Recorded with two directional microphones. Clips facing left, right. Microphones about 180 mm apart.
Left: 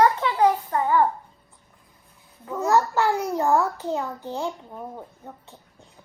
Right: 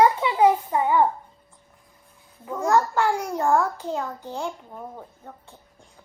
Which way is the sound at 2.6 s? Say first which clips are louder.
Even; 20° left (ahead or behind).